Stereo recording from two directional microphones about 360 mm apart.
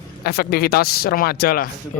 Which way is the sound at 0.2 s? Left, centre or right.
Left.